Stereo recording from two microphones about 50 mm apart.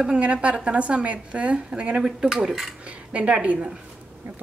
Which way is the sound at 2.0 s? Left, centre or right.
Centre.